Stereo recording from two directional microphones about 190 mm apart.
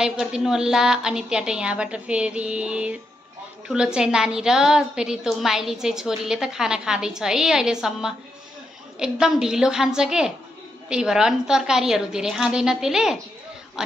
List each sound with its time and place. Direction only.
0.0 s a woman's voice: 5° right (ahead or behind)